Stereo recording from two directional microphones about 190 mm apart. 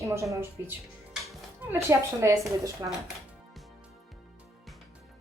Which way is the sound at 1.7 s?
15° right (ahead or behind).